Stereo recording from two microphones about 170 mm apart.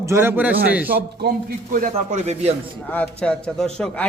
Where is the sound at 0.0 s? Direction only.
15° right (ahead or behind).